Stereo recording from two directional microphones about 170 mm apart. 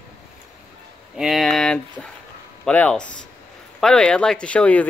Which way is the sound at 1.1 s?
Centre (ahead or behind).